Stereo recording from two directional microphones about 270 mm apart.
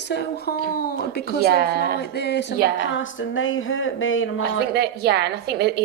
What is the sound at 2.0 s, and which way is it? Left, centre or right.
Speech, left.